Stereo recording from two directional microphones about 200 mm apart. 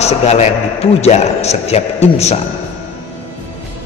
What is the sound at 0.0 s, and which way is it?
A man's voice, 35° left (ahead or behind).